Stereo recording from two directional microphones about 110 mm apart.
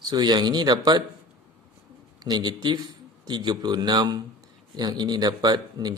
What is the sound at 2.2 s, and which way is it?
A man's voice, 40° right (ahead or behind).